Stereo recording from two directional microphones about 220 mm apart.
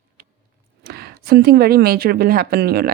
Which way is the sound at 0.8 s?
45° right (ahead or behind).